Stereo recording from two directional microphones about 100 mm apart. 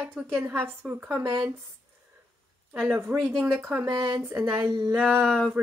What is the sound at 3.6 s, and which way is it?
Speech, 25° right (ahead or behind).